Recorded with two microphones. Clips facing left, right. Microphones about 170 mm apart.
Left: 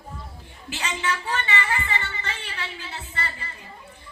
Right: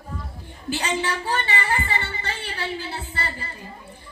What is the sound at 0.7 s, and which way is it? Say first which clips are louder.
Music: right 4 dB; 35° right (ahead or behind).